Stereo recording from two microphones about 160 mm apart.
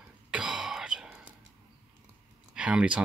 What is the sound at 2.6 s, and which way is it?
Speech, 5° right (ahead or behind).